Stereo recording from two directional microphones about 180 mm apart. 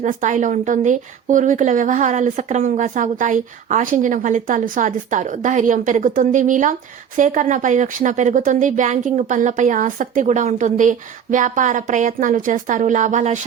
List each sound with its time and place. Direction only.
0.0 s a woman's voice: 45° right (ahead or behind)